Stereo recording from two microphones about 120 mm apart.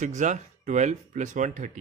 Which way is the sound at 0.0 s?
90° right.